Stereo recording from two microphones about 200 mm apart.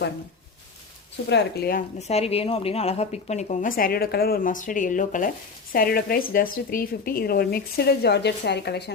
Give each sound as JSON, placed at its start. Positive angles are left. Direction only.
{"t": 1.3, "sound": "speech", "side_deg": 55}
{"t": 2.0, "sound": "a woman's voice", "side_deg": 30}